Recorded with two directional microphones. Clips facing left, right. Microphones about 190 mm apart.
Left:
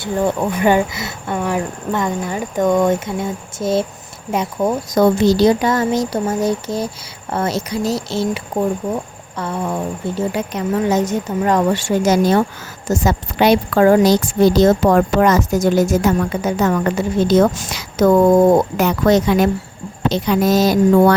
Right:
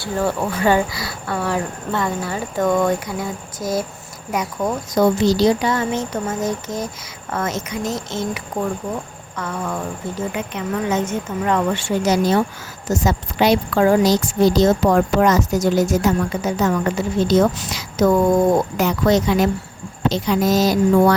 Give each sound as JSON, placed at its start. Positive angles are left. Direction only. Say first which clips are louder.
{"t": 0.0, "sound": "speech", "louder": "left 3 dB", "side_deg": 20}
{"t": 4.9, "sound": "speech", "louder": "left 3 dB", "side_deg": 55}
{"t": 9.4, "sound": "a woman's voice", "louder": "left 4 dB", "side_deg": 30}